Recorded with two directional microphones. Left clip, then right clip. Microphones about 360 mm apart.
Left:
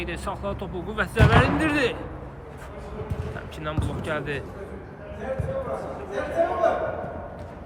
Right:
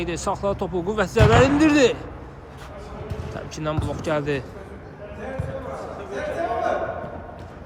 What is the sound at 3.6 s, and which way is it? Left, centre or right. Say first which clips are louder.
Speech: right 5 dB; centre.